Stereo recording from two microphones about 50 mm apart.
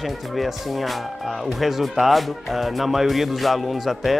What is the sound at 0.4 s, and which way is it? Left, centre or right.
Speech, centre.